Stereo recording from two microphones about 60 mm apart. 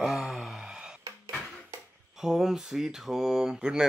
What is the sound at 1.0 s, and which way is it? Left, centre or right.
Dishes, right.